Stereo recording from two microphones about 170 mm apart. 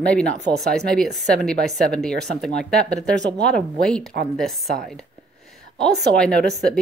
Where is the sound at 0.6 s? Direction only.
5° left (ahead or behind).